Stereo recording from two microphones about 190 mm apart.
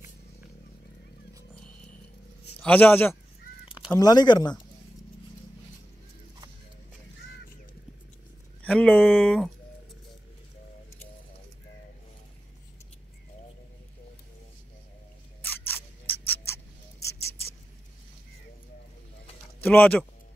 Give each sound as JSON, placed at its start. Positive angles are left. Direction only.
{"t": 2.6, "sound": "speech", "side_deg": 10}
{"t": 8.6, "sound": "speech", "side_deg": 5}
{"t": 15.4, "sound": "a sound", "side_deg": 10}
{"t": 19.6, "sound": "speech", "side_deg": 10}